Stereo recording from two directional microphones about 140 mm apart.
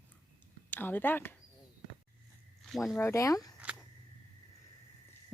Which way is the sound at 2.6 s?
Centre (ahead or behind).